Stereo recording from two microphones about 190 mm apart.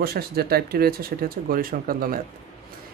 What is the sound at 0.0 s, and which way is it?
Speech, 55° right (ahead or behind).